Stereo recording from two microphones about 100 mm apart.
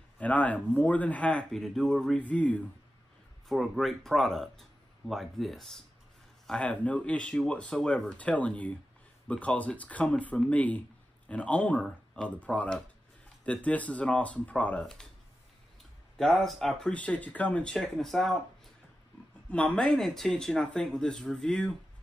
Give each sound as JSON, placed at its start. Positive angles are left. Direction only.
{"t": 0.2, "sound": "speech", "side_deg": 15}
{"t": 3.4, "sound": "speech", "side_deg": 0}
{"t": 16.2, "sound": "speech", "side_deg": 5}
{"t": 19.5, "sound": "speech", "side_deg": 10}